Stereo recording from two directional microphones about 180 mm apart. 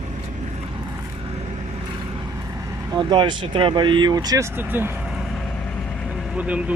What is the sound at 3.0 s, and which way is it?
Speech, 25° right (ahead or behind).